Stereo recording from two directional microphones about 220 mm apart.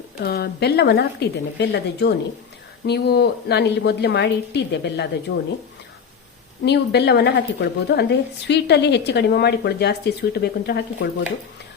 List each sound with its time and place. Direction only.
0.2 s a woman's voice: 45° left (ahead or behind)
6.7 s a woman's voice: 50° left (ahead or behind)